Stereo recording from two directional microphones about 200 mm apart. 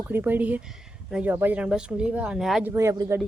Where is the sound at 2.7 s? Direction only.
15° right (ahead or behind).